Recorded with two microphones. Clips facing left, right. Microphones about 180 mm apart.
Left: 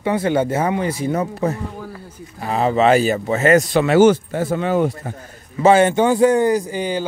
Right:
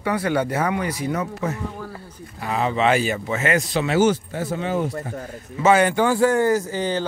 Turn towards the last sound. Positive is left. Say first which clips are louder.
# left 1 dB
turn(degrees=10)  # may be behind; listen again after turning